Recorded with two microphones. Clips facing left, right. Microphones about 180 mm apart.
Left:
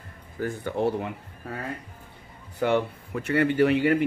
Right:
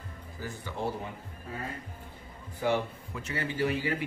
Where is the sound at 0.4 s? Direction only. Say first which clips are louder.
Left 9 dB; 55° left (ahead or behind).